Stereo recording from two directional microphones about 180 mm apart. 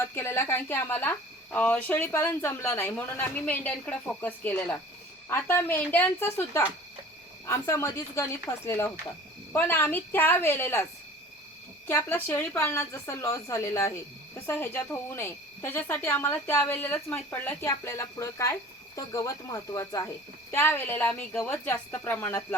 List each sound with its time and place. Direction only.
0.0 s a woman's voice: 15° left (ahead or behind)
11.9 s a woman's voice: 15° left (ahead or behind)